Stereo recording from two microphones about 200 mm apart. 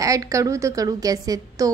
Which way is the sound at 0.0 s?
15° right (ahead or behind).